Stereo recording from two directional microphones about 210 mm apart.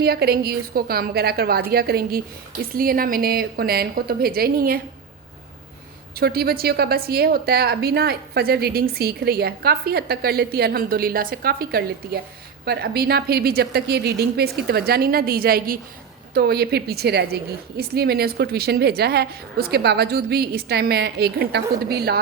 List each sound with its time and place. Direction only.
0.0 s a woman's voice: 50° right (ahead or behind)
6.1 s a woman's voice: 50° right (ahead or behind)